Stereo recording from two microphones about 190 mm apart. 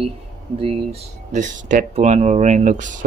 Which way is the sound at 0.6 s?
30° right (ahead or behind).